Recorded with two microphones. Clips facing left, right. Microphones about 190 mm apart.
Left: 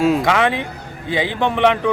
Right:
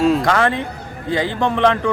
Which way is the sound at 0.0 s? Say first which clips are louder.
Even; 5° left (ahead or behind).